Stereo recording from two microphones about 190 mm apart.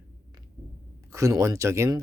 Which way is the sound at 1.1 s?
15° right (ahead or behind).